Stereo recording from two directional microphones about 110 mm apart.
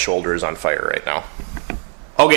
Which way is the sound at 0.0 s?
20° right (ahead or behind).